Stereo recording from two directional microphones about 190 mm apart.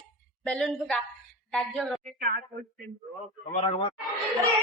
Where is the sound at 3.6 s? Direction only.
30° left (ahead or behind).